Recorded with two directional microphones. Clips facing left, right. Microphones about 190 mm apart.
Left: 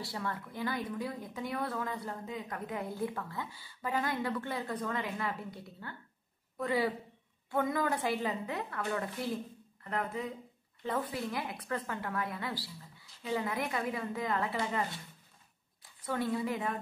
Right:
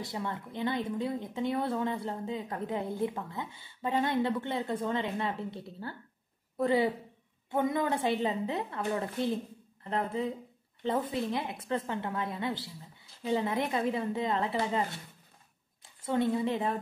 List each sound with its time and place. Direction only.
0.0 s a woman's voice: 20° right (ahead or behind)